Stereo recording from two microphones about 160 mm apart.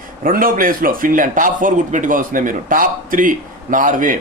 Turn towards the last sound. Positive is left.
turn(degrees=-55)  # may be behind; listen again after turning